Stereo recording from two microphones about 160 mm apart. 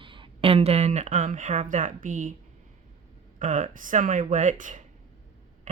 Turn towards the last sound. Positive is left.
turn(degrees=-55)  # may be behind; listen again after turning